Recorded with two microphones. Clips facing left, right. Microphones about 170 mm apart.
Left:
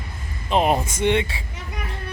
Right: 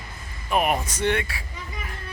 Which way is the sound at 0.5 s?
25° left (ahead or behind).